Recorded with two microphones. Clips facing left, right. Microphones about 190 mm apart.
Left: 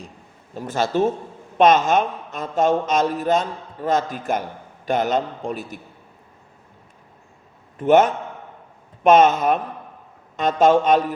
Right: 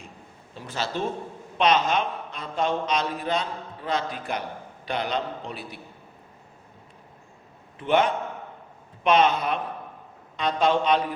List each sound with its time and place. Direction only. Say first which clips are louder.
0.5 s a man's voice: left 9 dB; 45° left (ahead or behind)
7.8 s a man's voice: left 7 dB; 45° left (ahead or behind)